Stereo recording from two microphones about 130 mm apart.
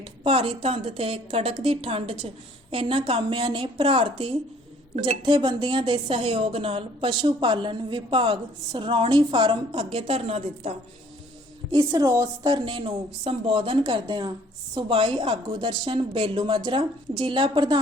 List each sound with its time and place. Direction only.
0.3 s a woman's voice: 45° right (ahead or behind)
5.2 s a woman's voice: 35° right (ahead or behind); by 10.8 s 50° right (ahead or behind)
11.7 s a woman's voice: 35° right (ahead or behind)